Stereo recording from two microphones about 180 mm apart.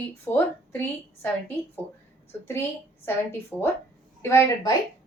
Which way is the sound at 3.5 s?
10° left (ahead or behind).